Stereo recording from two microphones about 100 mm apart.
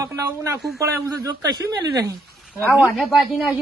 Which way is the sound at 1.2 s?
40° right (ahead or behind).